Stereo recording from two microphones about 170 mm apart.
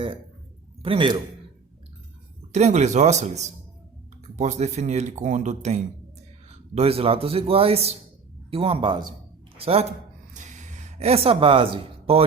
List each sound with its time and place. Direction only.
0.8 s a man's voice: 30° right (ahead or behind)
2.5 s a man's voice: 40° right (ahead or behind)
10.3 s a sound: 45° right (ahead or behind)